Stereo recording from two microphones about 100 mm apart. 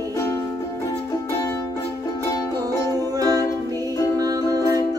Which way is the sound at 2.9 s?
35° right (ahead or behind).